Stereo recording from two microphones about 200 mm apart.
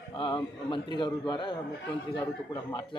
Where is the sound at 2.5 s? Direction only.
20° left (ahead or behind).